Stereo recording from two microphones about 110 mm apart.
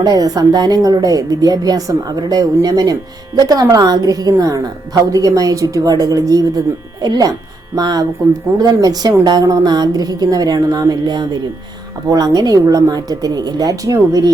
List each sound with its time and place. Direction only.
0.0 s a woman's voice: 35° right (ahead or behind)